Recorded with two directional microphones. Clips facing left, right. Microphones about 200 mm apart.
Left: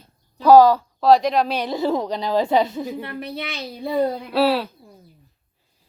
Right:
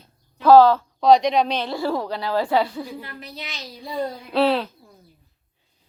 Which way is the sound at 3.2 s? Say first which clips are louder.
Left 7 dB; 60° left (ahead or behind).